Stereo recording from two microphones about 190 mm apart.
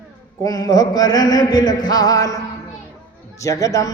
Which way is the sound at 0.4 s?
20° left (ahead or behind).